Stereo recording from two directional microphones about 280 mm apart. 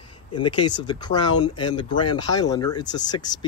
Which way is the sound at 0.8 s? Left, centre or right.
Centre.